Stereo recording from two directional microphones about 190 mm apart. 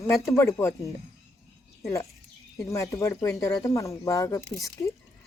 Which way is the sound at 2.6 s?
15° left (ahead or behind).